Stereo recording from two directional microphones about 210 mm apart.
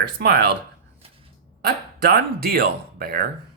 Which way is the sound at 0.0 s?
45° right (ahead or behind).